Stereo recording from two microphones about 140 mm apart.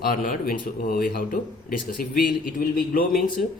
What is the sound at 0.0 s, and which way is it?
Speech, 80° left.